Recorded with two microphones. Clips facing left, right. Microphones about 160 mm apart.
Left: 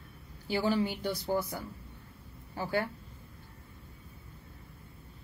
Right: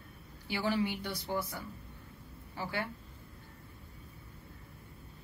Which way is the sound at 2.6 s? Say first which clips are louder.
Left 5 dB; 45° left (ahead or behind).